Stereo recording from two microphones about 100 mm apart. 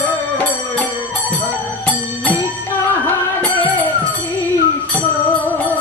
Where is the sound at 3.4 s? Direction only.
15° left (ahead or behind).